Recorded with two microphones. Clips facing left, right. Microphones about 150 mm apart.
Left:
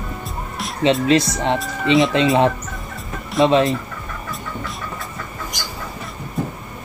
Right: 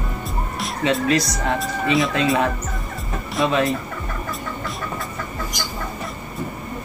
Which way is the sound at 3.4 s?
30° left (ahead or behind).